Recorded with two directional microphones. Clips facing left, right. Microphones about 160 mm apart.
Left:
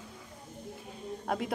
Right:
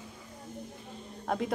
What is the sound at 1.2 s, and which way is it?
Speech, 5° left (ahead or behind).